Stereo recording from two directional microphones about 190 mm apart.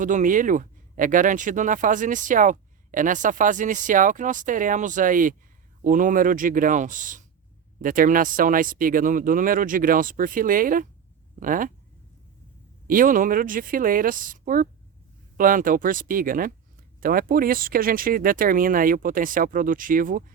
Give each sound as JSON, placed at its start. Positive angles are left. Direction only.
{"t": 0.0, "sound": "speech", "side_deg": -40}
{"t": 12.9, "sound": "speech", "side_deg": -45}